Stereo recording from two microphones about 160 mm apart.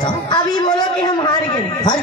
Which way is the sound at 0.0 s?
25° left (ahead or behind).